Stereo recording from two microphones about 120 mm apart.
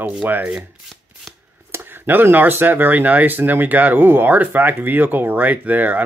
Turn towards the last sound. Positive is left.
turn(degrees=-15)  # may be behind; listen again after turning